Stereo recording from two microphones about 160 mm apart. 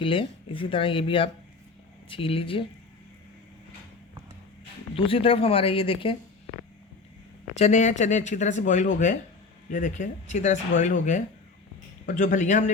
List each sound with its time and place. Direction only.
0.0 s speech: 35° left (ahead or behind)
4.9 s speech: 35° left (ahead or behind)
7.5 s speech: 45° left (ahead or behind)